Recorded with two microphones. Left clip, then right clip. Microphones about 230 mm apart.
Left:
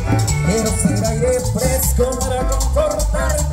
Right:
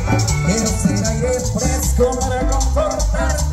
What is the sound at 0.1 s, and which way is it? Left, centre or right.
Music, left.